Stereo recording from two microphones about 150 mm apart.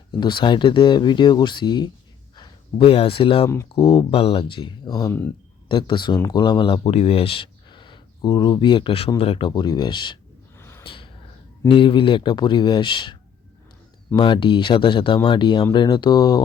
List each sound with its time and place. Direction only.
0.2 s speech: 30° left (ahead or behind)
5.6 s speech: 30° left (ahead or behind)
6.8 s speech: 45° left (ahead or behind)
10.6 s gasp: 15° left (ahead or behind)
10.8 s a sound: 35° left (ahead or behind)
11.7 s speech: 35° left (ahead or behind)
14.2 s speech: 35° left (ahead or behind)